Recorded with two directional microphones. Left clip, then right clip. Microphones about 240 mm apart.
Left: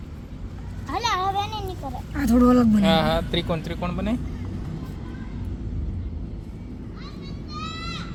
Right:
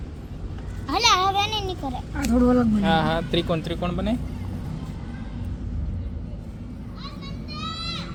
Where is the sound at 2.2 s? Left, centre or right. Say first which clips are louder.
Left 2 dB; left.